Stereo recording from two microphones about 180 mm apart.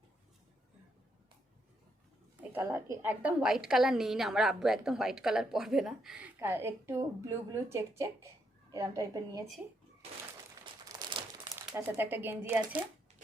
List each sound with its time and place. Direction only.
2.4 s a woman's voice: 10° right (ahead or behind)
10.8 s crumpling: 25° right (ahead or behind)
11.4 s speech: 15° right (ahead or behind)